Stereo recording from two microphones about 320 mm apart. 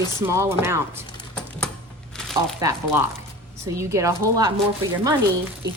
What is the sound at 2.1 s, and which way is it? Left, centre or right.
Crumpling, centre.